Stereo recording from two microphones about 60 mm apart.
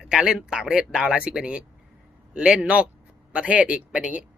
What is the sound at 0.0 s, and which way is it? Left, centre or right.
Speech, centre.